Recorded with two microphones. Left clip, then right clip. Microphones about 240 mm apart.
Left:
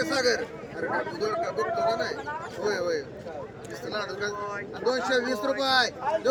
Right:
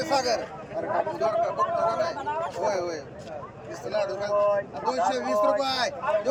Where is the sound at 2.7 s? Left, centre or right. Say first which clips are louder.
Even; centre.